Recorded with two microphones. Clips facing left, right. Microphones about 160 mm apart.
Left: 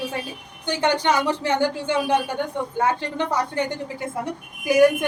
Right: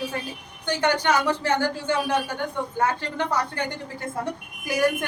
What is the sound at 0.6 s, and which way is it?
A woman's voice, 20° left (ahead or behind).